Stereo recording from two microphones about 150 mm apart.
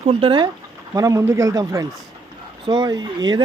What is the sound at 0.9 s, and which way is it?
Speech, 20° right (ahead or behind).